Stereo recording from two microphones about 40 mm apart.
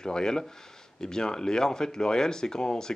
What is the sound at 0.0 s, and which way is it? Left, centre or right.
Speech, centre.